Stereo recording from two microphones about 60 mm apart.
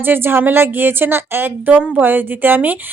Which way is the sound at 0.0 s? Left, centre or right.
Right.